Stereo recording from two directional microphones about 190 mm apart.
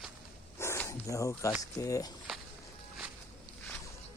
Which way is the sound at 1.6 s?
20° left (ahead or behind).